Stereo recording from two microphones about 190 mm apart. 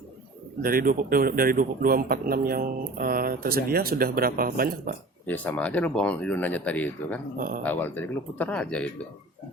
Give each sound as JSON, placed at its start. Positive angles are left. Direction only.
{"t": 0.6, "sound": "a man's voice", "side_deg": -50}
{"t": 5.2, "sound": "speech", "side_deg": 10}
{"t": 7.3, "sound": "a man's voice", "side_deg": -50}
{"t": 7.6, "sound": "speech", "side_deg": 10}